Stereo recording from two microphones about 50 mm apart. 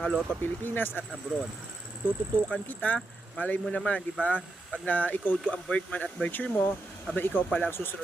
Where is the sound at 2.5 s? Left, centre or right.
Left.